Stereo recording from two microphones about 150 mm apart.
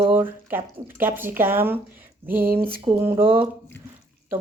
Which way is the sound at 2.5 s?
80° right.